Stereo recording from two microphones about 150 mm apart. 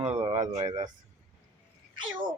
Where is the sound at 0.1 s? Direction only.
45° right (ahead or behind).